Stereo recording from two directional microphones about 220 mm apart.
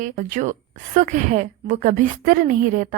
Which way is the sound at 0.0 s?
35° right (ahead or behind).